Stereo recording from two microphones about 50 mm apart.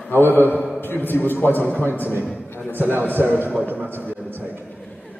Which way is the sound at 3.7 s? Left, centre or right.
Right.